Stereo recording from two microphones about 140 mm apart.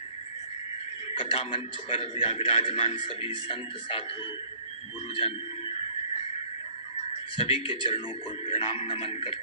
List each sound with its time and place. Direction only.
1.1 s a man's voice: 40° left (ahead or behind)
5.1 s a sound: 40° left (ahead or behind)
7.3 s a man's voice: 40° left (ahead or behind)